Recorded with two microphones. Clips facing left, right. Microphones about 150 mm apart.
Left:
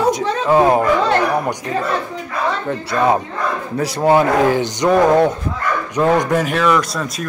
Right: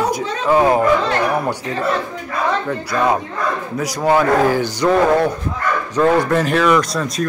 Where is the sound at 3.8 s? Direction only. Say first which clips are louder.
Left 2 dB; 25° left (ahead or behind).